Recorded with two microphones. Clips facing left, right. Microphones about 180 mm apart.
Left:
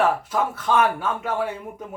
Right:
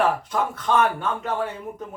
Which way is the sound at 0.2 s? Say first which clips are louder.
Left 1 dB; 5° left (ahead or behind).